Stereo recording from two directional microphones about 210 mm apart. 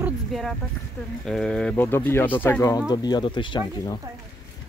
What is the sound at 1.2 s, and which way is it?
Speech, centre (ahead or behind).